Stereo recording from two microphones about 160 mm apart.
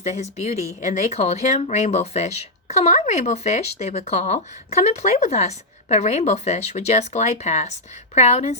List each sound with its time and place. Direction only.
0.0 s speech: 45° left (ahead or behind)